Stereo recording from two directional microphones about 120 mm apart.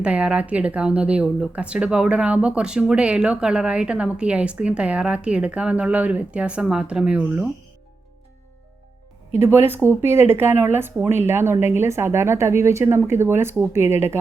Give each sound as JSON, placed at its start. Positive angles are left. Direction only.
{"t": 0.0, "sound": "speech", "side_deg": -10}
{"t": 9.3, "sound": "speech", "side_deg": -20}